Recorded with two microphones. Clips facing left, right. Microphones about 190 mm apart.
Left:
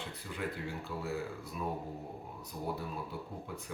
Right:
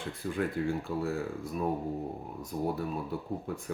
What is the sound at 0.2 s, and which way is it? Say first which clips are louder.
Speech: right 15 dB; 50° right (ahead or behind).